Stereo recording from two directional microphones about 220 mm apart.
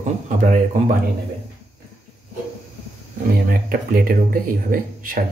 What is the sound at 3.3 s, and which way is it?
Speech, 40° right (ahead or behind).